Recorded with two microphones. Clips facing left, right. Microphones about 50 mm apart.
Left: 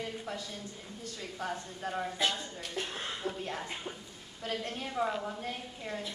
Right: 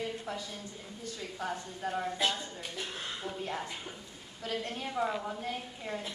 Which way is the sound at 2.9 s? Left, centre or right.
Centre.